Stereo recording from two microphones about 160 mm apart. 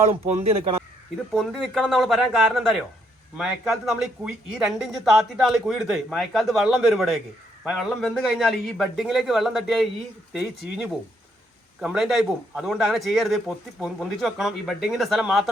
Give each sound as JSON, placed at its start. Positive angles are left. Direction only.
{"t": 0.1, "sound": "speech", "side_deg": -40}
{"t": 1.3, "sound": "speech", "side_deg": 0}
{"t": 11.8, "sound": "speech", "side_deg": -5}